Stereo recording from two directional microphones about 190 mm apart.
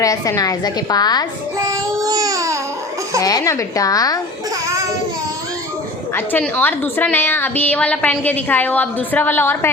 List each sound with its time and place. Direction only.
0.0 s a woman's voice: 20° left (ahead or behind)
1.5 s babbling: 15° right (ahead or behind)
3.2 s a woman's voice: 20° left (ahead or behind)
6.1 s a woman's voice: 10° left (ahead or behind)